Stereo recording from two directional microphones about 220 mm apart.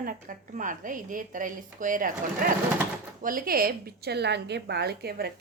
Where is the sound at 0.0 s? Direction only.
35° right (ahead or behind).